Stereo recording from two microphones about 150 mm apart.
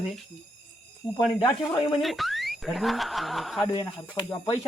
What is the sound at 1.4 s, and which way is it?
Speech, 30° left (ahead or behind).